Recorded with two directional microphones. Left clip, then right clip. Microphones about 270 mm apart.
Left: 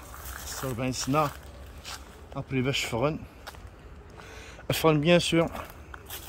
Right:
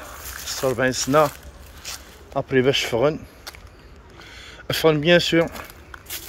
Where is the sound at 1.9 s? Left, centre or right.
Right.